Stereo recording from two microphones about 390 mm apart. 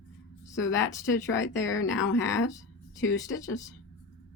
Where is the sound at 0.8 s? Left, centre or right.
Centre.